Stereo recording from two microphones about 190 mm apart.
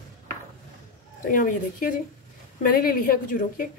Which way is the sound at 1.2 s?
45° left (ahead or behind).